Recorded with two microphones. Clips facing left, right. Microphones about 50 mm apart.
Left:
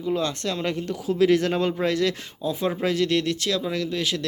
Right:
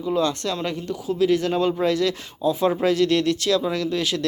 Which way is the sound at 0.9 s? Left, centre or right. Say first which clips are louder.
Left 1 dB; left.